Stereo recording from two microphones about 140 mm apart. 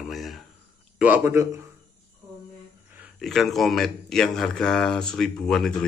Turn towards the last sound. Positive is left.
turn(degrees=5)  # may be behind; listen again after turning